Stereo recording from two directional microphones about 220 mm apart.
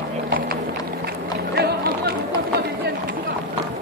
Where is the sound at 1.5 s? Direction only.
45° right (ahead or behind).